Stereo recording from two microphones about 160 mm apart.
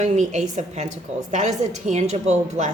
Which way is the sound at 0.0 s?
50° right (ahead or behind).